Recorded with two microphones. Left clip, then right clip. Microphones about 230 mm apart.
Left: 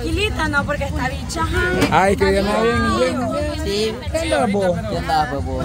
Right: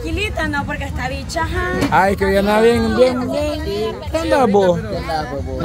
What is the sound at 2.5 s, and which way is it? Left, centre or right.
Speech, right.